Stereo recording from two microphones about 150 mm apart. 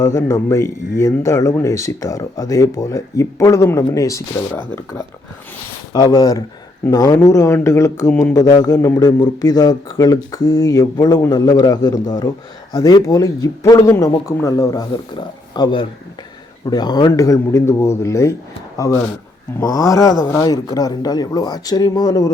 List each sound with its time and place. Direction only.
0.0 s speech: 20° left (ahead or behind)
19.6 s speech: 25° left (ahead or behind)